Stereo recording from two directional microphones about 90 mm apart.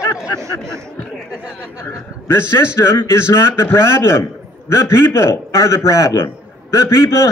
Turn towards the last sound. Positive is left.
turn(degrees=30)  # may be behind; listen again after turning